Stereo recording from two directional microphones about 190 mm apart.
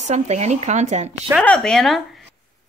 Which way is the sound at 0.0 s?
35° right (ahead or behind).